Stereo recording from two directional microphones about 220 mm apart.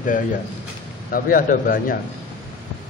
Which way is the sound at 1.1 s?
40° left (ahead or behind).